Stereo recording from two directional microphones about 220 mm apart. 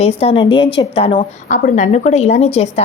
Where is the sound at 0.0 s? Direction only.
25° left (ahead or behind).